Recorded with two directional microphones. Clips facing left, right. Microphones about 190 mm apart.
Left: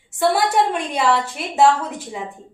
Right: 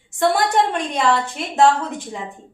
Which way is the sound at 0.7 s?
5° left (ahead or behind).